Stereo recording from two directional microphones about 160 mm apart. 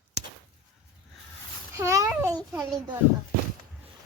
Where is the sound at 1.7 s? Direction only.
20° right (ahead or behind).